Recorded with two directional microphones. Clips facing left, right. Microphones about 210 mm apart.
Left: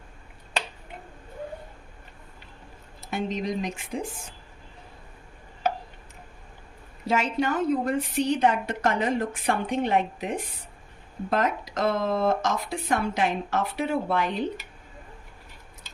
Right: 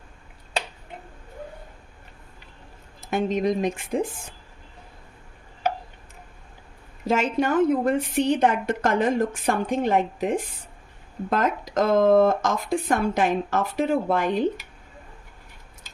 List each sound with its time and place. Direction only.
3.1 s a woman's voice: 50° right (ahead or behind)
7.1 s a woman's voice: 50° right (ahead or behind)